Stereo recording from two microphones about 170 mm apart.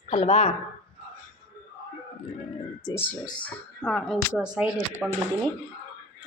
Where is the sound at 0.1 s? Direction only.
35° left (ahead or behind).